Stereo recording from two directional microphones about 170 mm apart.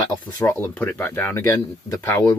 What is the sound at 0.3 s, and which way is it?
Speech, 15° left (ahead or behind).